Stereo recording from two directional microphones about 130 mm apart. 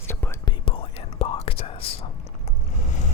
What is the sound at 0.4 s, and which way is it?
Whispering, 45° left (ahead or behind).